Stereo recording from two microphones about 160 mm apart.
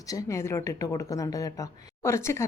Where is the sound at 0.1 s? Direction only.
20° left (ahead or behind).